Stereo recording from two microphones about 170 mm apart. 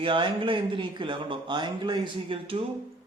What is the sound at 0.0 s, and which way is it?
A man's voice, 30° right (ahead or behind).